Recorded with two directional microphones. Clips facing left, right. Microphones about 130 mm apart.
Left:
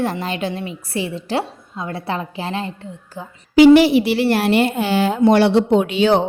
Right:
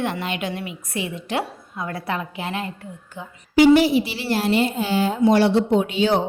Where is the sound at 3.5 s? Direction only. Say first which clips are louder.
Left 5 dB; 85° left.